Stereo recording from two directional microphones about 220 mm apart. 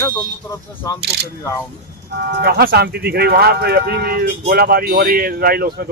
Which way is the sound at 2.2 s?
45° right (ahead or behind).